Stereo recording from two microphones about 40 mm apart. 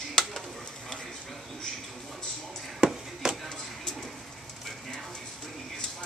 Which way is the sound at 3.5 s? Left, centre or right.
Centre.